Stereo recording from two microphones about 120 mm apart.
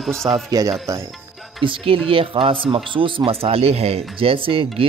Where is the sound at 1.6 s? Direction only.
45° right (ahead or behind).